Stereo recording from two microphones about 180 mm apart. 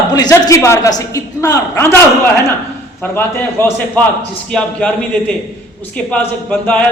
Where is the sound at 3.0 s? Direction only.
10° left (ahead or behind).